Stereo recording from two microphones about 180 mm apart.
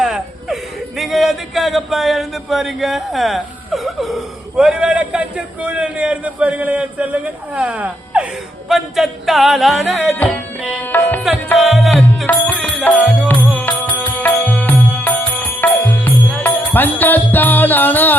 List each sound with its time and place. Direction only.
0.0 s speech: centre (ahead or behind)
8.7 s music: centre (ahead or behind)
11.5 s music: centre (ahead or behind)